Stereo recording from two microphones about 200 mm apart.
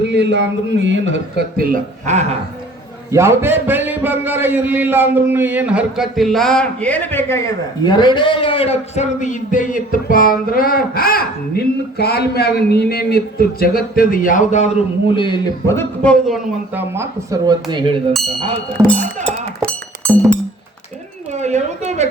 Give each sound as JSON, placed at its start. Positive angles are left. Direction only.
{"t": 0.1, "sound": "a man's voice", "side_deg": -60}
{"t": 1.5, "sound": "speech", "side_deg": -40}
{"t": 3.1, "sound": "a man's voice", "side_deg": -15}
{"t": 16.3, "sound": "speech", "side_deg": -10}
{"t": 21.3, "sound": "a sound", "side_deg": -35}